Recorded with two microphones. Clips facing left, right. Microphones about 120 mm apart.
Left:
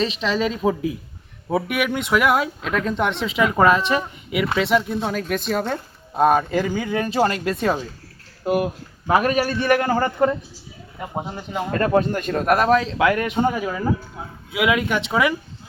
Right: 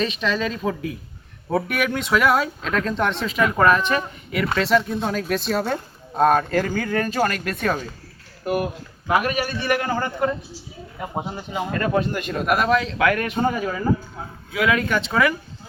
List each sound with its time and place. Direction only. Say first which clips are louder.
0.0 s speech: left 2 dB; 25° left (ahead or behind)
1.5 s speech: left 1 dB; 10° left (ahead or behind)
3.8 s speech: left 1 dB; 25° left (ahead or behind)
4.3 s speech: even; 10° left (ahead or behind)
9.0 s a man's voice: left 3 dB; 35° left (ahead or behind)
11.0 s speech: even; 5° right (ahead or behind)
11.8 s a man's voice: left 4 dB; 40° left (ahead or behind); by 13.5 s 20° left (ahead or behind)
13.5 s speech: even; 10° left (ahead or behind)
14.5 s speech: left 1 dB; 15° left (ahead or behind)